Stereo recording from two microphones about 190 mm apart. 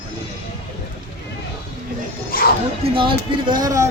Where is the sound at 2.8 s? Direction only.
25° right (ahead or behind).